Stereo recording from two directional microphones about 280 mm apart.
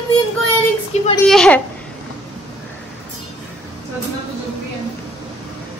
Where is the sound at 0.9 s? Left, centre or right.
Left.